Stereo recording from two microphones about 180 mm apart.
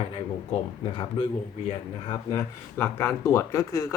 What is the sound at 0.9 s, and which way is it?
Speech, 30° left (ahead or behind).